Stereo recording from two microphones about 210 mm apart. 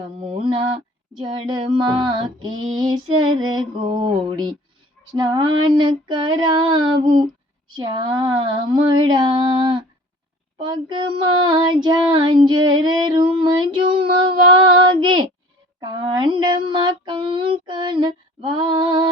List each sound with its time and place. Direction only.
0.2 s mantra: 25° right (ahead or behind)
1.3 s female singing: 20° right (ahead or behind)